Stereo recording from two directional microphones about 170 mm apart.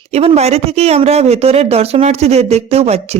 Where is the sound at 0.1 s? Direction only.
40° right (ahead or behind).